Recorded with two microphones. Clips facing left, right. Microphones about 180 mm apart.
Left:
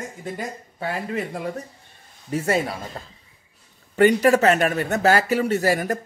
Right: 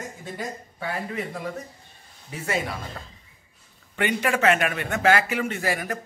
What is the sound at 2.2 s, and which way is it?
Speech, 40° left (ahead or behind).